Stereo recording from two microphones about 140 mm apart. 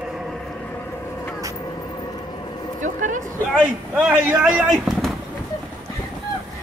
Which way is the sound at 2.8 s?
65° right (ahead or behind).